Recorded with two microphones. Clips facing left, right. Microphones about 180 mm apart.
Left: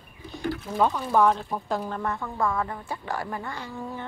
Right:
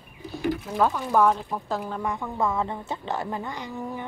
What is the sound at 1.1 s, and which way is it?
A woman's voice, 5° right (ahead or behind).